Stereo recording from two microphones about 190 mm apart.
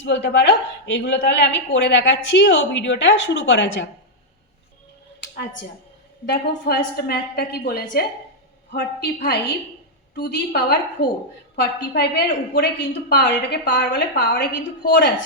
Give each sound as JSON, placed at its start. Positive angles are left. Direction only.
{"t": 0.0, "sound": "a woman's voice", "side_deg": 65}
{"t": 5.2, "sound": "a sound", "side_deg": 45}
{"t": 6.2, "sound": "a woman's voice", "side_deg": 60}
{"t": 10.2, "sound": "a woman's voice", "side_deg": 55}